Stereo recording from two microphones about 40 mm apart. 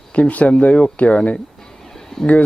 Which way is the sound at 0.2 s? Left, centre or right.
Left.